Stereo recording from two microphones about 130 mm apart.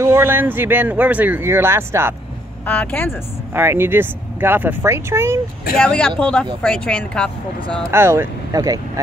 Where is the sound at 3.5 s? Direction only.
15° right (ahead or behind).